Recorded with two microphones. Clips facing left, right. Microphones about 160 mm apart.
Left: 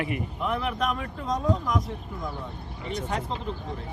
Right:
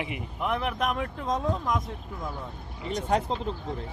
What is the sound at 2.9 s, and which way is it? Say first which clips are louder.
Speech: right 4 dB; 40° right (ahead or behind).